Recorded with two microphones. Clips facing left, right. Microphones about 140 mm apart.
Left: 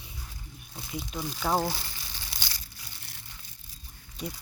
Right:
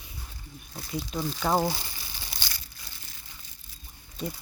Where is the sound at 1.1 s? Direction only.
5° left (ahead or behind).